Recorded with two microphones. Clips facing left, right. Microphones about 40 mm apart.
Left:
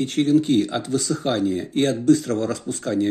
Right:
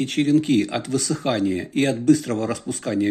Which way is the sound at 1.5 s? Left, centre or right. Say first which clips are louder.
Even; right.